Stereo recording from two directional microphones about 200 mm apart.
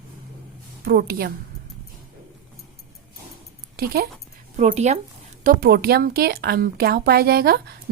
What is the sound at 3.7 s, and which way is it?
Speech, 50° right (ahead or behind).